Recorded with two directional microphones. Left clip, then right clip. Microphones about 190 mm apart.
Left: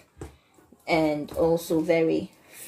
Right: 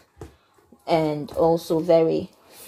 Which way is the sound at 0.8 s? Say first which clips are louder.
Right 2 dB; 40° right (ahead or behind).